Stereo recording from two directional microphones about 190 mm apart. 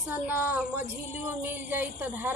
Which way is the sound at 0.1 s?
10° right (ahead or behind).